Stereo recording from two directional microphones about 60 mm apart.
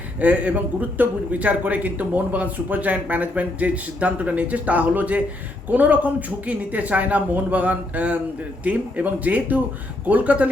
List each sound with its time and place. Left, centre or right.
0.2 s speech: right